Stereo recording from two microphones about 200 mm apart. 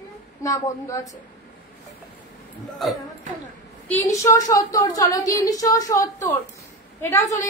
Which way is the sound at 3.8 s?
15° left (ahead or behind).